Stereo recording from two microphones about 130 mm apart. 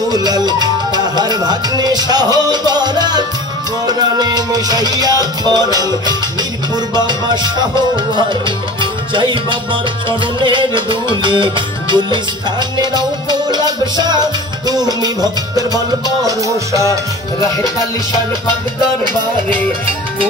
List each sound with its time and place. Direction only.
0.1 s music: 30° right (ahead or behind)
16.3 s music: 25° right (ahead or behind)